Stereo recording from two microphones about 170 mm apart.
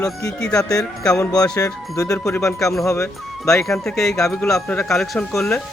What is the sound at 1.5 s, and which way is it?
Speech, 20° left (ahead or behind).